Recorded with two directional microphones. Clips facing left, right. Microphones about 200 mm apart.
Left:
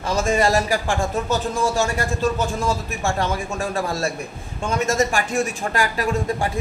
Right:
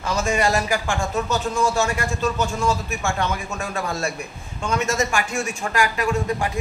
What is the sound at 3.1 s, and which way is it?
A man's voice, 30° left (ahead or behind).